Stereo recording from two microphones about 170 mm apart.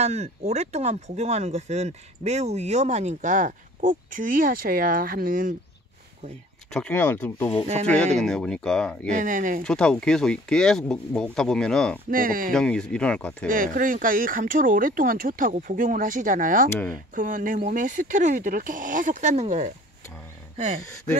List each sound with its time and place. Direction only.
0.0 s speech: 40° right (ahead or behind)
6.7 s speech: 10° left (ahead or behind)
9.1 s speech: 50° right (ahead or behind)
9.6 s speech: 5° left (ahead or behind)
12.1 s speech: 55° right (ahead or behind)
12.5 s speech: 5° left (ahead or behind)
13.5 s speech: 55° right (ahead or behind)